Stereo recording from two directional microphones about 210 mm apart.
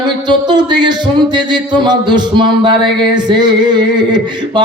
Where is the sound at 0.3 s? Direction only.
20° right (ahead or behind).